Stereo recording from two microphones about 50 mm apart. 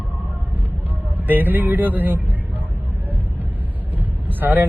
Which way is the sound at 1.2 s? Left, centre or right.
Right.